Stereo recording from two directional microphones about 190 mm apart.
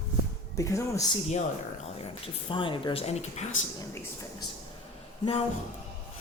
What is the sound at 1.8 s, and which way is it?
Speech, 30° left (ahead or behind).